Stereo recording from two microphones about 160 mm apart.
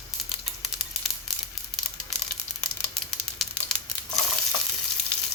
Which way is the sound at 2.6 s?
5° left (ahead or behind).